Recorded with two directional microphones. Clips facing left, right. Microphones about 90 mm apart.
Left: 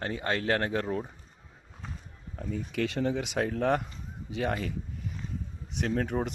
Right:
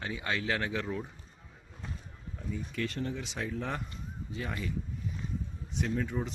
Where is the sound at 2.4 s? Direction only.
80° left.